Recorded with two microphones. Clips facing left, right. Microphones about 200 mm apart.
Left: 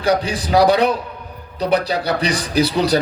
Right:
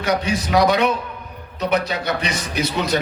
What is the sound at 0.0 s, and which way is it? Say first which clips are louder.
A man's voice: left 3 dB; 35° left (ahead or behind).